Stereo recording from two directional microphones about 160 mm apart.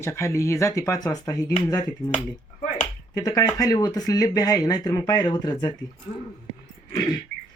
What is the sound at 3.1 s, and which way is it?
Speech, 25° left (ahead or behind).